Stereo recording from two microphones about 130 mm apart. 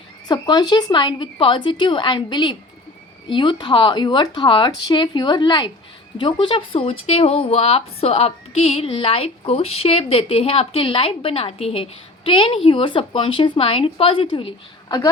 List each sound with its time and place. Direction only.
0.3 s speech: 35° left (ahead or behind)